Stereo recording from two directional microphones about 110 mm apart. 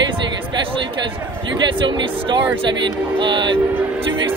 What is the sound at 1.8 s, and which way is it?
Speech, 45° right (ahead or behind).